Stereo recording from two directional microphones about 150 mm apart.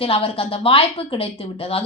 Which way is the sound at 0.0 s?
40° left (ahead or behind).